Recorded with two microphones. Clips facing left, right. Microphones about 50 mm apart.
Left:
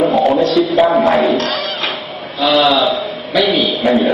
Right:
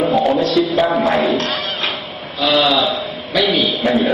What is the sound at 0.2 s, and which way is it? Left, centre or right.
Music, centre.